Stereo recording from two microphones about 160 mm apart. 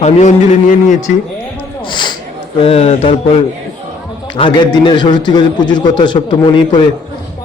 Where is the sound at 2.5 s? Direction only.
40° left (ahead or behind).